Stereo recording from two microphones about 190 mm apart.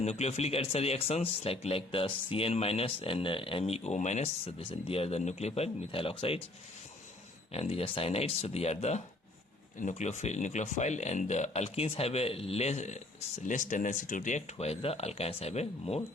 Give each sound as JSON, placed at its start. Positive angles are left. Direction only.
{"t": 0.0, "sound": "speech", "side_deg": 35}
{"t": 7.5, "sound": "speech", "side_deg": 30}